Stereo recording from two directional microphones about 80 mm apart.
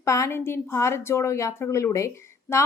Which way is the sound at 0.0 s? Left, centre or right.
Left.